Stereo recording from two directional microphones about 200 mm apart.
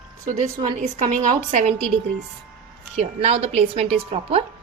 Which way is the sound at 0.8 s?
35° right (ahead or behind).